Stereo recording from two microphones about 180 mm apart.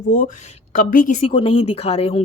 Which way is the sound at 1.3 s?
30° left (ahead or behind).